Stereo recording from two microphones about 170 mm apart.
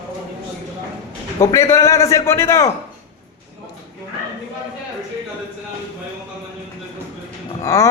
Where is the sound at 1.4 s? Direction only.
20° left (ahead or behind).